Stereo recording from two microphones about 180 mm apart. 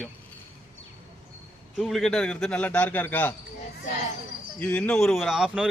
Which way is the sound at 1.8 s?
Centre (ahead or behind).